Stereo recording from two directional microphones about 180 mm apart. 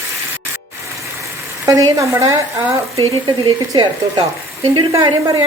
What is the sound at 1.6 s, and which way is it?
Speech, 20° right (ahead or behind).